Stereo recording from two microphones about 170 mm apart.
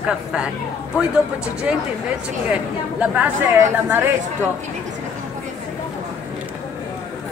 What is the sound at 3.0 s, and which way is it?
A woman's voice, 10° right (ahead or behind).